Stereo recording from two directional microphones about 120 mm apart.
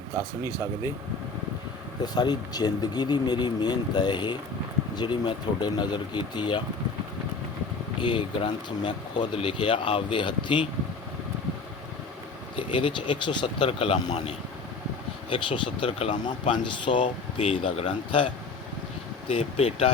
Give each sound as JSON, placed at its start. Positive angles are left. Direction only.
{"t": 2.1, "sound": "speech", "side_deg": 35}
{"t": 7.9, "sound": "speech", "side_deg": 40}
{"t": 12.5, "sound": "speech", "side_deg": 45}
{"t": 15.3, "sound": "speech", "side_deg": 45}
{"t": 19.3, "sound": "speech", "side_deg": 60}